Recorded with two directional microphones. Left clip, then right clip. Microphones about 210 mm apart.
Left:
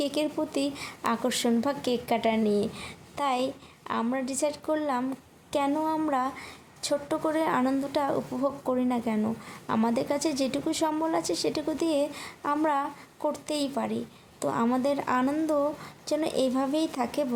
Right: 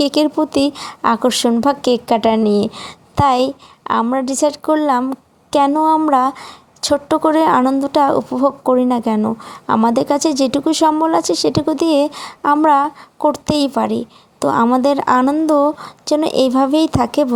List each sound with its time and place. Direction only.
0.0 s a woman's voice: 40° right (ahead or behind)